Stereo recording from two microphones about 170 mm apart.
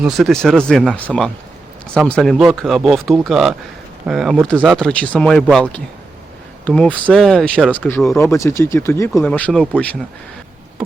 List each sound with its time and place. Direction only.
0.0 s speech: centre (ahead or behind)
8.2 s speech: 15° left (ahead or behind)